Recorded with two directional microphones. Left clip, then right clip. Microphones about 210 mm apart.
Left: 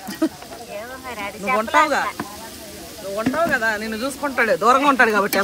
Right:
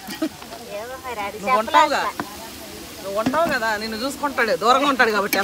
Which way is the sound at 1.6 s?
Centre (ahead or behind).